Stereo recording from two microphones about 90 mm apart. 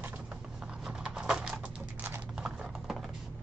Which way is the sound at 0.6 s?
5° right (ahead or behind).